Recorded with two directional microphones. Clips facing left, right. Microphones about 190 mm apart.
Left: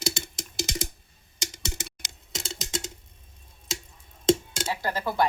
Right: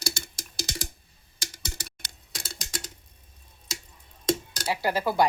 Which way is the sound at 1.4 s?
20° left (ahead or behind).